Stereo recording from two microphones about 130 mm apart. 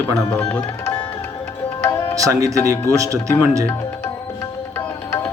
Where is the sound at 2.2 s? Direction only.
25° right (ahead or behind).